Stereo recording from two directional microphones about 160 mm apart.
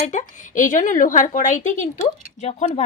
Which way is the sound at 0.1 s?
55° left (ahead or behind).